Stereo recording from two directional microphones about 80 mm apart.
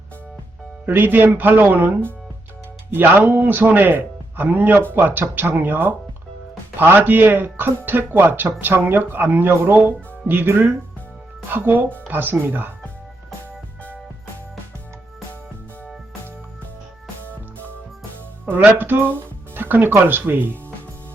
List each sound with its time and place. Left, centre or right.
0.9 s speech: right
2.9 s speech: right
18.4 s speech: right